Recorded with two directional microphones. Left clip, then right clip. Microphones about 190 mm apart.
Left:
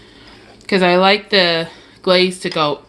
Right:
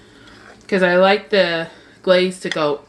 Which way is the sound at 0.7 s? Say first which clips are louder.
Left 1 dB; 45° left (ahead or behind).